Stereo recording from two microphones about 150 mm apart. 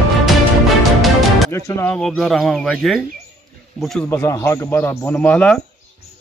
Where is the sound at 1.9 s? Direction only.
5° left (ahead or behind).